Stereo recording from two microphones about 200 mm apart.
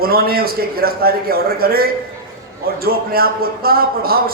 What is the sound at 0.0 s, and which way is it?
A man's voice, 50° right (ahead or behind).